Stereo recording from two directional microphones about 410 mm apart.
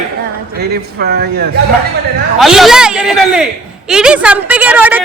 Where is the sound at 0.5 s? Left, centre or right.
Right.